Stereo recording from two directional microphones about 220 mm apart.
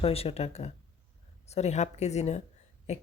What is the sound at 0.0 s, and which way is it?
Speech, 25° left (ahead or behind).